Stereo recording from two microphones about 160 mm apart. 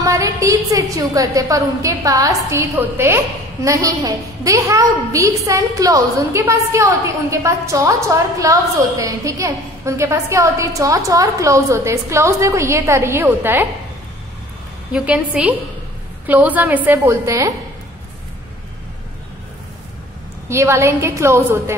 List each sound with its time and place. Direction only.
0.0 s a woman's voice: 20° right (ahead or behind)
14.9 s a woman's voice: 5° right (ahead or behind)
20.4 s a woman's voice: 15° right (ahead or behind)